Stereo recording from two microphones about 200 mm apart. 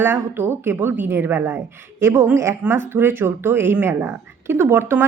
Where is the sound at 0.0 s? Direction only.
10° right (ahead or behind).